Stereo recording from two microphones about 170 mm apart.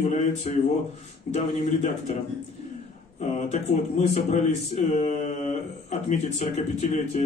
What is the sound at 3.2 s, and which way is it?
Speech, 40° left (ahead or behind).